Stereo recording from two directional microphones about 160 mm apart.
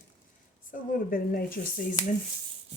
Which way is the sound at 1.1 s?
65° left (ahead or behind).